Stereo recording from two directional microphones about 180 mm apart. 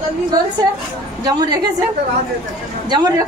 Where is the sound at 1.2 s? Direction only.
20° right (ahead or behind).